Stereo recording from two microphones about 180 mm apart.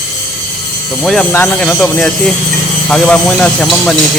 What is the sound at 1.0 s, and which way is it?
Speech, 5° left (ahead or behind).